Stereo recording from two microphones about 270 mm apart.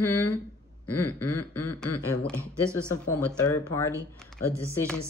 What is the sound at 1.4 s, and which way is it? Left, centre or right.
Speech, left.